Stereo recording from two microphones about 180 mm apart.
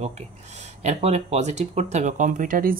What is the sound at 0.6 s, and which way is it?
Speech, 40° right (ahead or behind).